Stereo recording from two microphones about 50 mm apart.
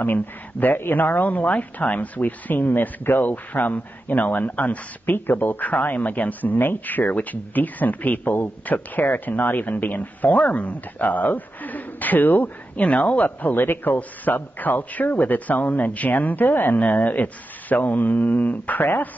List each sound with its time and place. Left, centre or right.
0.0 s speech: left